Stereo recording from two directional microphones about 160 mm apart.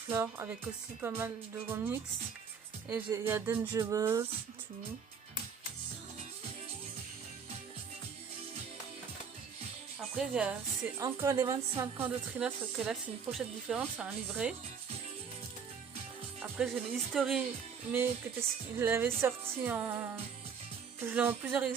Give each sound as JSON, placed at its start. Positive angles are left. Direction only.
{"t": 0.1, "sound": "a woman's voice", "side_deg": -15}
{"t": 10.2, "sound": "speech", "side_deg": -5}
{"t": 10.9, "sound": "a woman's voice", "side_deg": -20}
{"t": 16.4, "sound": "speech", "side_deg": -5}
{"t": 17.9, "sound": "a woman's voice", "side_deg": -15}